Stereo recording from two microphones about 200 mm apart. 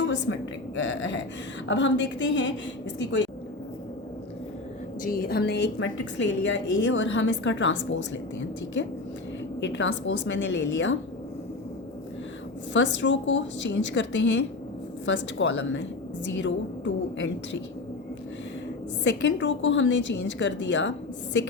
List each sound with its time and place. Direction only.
0.0 s a sound: 65° left (ahead or behind)
0.8 s a woman's voice: 70° left (ahead or behind)
5.0 s a woman's voice: 45° left (ahead or behind); by 10.9 s 65° left (ahead or behind)
12.7 s a woman's voice: 65° left (ahead or behind)
19.0 s a woman's voice: 65° left (ahead or behind)